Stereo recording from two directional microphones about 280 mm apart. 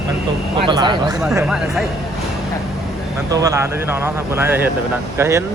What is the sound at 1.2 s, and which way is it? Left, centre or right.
Speech, centre.